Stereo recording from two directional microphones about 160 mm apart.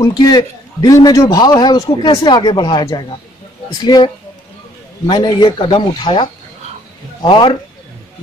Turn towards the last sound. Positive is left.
turn(degrees=30)  # may be behind; listen again after turning